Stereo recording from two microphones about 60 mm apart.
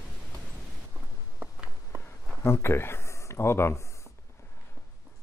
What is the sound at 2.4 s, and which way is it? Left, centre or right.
Speech, left.